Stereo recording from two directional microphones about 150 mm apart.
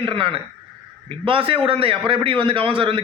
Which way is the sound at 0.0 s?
35° right (ahead or behind).